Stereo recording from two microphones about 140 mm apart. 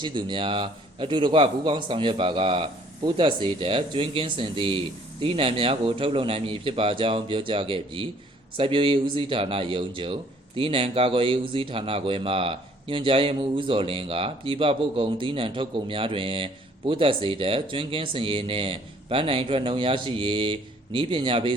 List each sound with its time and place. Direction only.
0.0 s speech: 35° right (ahead or behind)